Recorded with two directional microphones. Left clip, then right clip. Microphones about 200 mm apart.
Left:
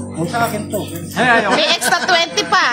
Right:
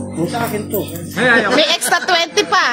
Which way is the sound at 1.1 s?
30° left (ahead or behind).